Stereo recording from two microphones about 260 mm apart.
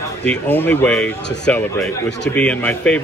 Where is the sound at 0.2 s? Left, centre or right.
Centre.